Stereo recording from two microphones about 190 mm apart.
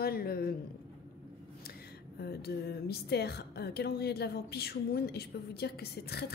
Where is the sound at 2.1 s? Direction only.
55° left (ahead or behind).